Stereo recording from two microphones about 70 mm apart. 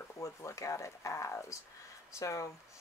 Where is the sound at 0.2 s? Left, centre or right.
Left.